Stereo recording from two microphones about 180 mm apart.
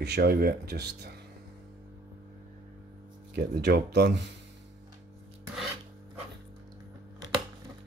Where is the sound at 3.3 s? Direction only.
65° right (ahead or behind).